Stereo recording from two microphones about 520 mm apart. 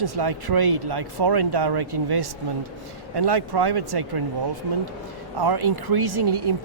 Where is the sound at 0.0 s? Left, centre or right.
Right.